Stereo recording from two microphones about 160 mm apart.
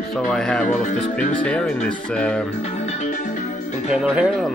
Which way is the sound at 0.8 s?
50° left (ahead or behind).